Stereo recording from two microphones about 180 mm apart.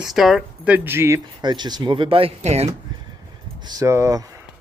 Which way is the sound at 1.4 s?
25° right (ahead or behind).